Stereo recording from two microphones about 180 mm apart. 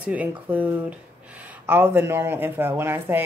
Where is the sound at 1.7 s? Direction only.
10° right (ahead or behind).